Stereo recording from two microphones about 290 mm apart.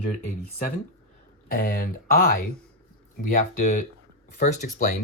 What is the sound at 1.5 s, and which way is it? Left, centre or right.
Speech, left.